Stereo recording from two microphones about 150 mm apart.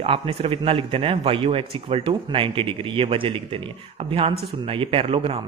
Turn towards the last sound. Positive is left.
turn(degrees=-40)  # may be behind; listen again after turning